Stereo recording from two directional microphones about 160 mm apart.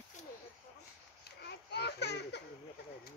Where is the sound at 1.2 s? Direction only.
90° left.